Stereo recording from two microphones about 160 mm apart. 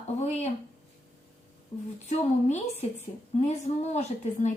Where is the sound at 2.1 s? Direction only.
45° left (ahead or behind).